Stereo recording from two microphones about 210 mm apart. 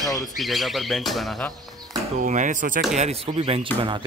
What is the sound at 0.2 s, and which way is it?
Speech, centre (ahead or behind).